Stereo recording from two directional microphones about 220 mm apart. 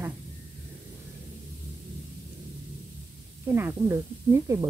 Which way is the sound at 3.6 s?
10° right (ahead or behind).